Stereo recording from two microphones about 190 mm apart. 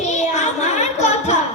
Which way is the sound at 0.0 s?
35° left (ahead or behind).